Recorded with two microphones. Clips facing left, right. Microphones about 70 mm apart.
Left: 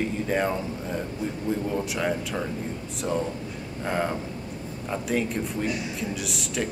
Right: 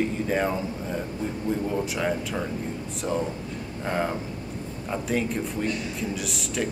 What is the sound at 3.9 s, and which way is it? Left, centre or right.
Speech, centre.